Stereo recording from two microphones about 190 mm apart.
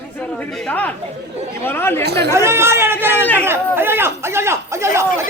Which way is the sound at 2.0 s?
60° right (ahead or behind).